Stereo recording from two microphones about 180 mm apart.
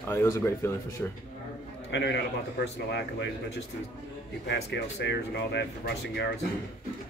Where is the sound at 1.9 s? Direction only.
70° left (ahead or behind).